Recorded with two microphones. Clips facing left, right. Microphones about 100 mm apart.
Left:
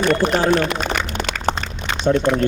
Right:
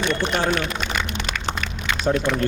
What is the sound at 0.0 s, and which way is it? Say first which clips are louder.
Speech: left 5 dB; 45° left (ahead or behind).